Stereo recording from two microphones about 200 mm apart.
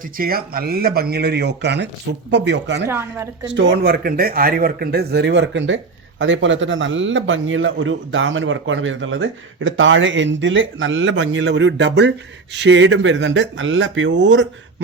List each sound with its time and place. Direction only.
0.0 s speech: 45° right (ahead or behind)
2.8 s speech: 10° right (ahead or behind)
3.4 s a man's voice: 65° right (ahead or behind)